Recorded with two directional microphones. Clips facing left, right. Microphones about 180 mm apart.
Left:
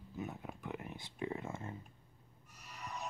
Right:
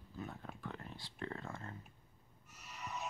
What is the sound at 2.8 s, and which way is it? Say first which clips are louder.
Music: even; 5° right (ahead or behind).